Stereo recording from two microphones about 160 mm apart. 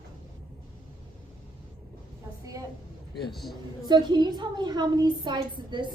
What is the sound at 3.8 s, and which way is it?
A woman's voice, 25° right (ahead or behind).